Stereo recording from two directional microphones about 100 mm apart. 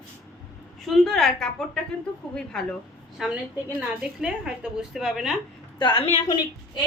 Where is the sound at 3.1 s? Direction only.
5° right (ahead or behind).